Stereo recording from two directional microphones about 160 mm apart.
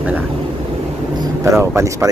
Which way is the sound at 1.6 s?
15° right (ahead or behind).